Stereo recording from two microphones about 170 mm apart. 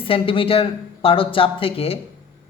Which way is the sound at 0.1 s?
35° left (ahead or behind).